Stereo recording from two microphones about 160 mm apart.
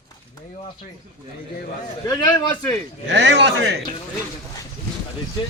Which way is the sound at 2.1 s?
25° left (ahead or behind).